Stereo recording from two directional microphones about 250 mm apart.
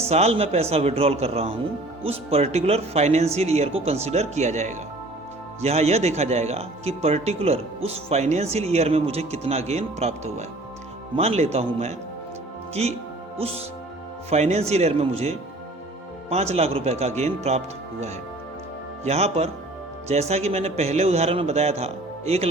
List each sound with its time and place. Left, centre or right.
0.0 s speech: right
19.0 s speech: right